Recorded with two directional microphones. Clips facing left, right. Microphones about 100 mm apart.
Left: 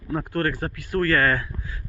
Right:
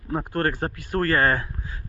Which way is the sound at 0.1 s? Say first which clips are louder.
Even; 30° right (ahead or behind).